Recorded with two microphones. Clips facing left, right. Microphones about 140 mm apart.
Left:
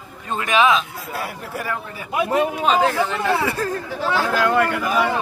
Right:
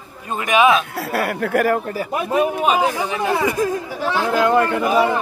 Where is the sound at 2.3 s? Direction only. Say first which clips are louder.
Right 2 dB; 15° right (ahead or behind).